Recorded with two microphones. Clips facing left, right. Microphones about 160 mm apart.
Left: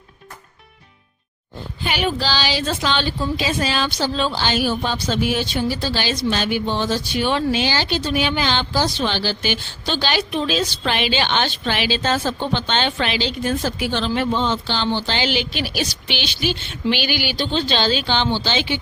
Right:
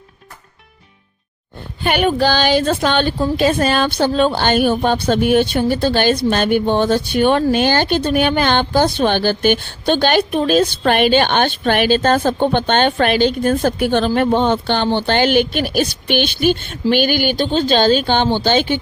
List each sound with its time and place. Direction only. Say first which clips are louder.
1.8 s a woman's voice: right 7 dB; 55° right (ahead or behind)